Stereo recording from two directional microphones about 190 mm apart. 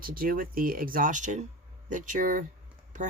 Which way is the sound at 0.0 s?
50° right (ahead or behind).